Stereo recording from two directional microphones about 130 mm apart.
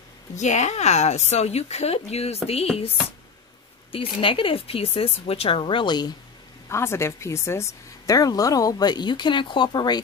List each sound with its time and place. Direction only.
0.4 s a woman's voice: 65° left (ahead or behind)
3.9 s speech: 45° left (ahead or behind)
6.7 s speech: 20° left (ahead or behind)